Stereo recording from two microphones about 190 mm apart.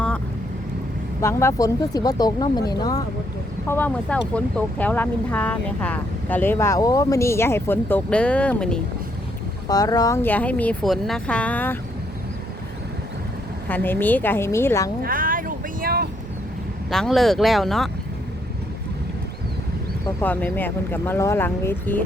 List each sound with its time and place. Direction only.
1.2 s speech: 15° left (ahead or behind)
3.7 s speech: 10° left (ahead or behind)
9.6 s speech: 20° left (ahead or behind)
13.7 s speech: 10° left (ahead or behind)
15.0 s a sound: 45° right (ahead or behind)
16.9 s speech: centre (ahead or behind)
20.2 s speech: 10° left (ahead or behind)